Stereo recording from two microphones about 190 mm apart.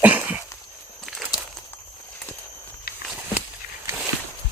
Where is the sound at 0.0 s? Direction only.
10° right (ahead or behind).